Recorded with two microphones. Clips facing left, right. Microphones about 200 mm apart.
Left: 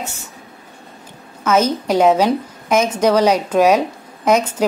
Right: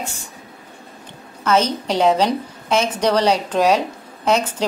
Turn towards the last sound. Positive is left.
turn(degrees=10)  # may be behind; listen again after turning